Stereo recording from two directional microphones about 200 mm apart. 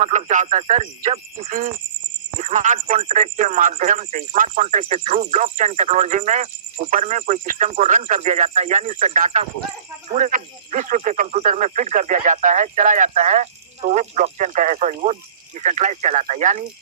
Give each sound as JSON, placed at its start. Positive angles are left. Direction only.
{"t": 0.0, "sound": "speech", "side_deg": -35}
{"t": 1.5, "sound": "speech", "side_deg": -40}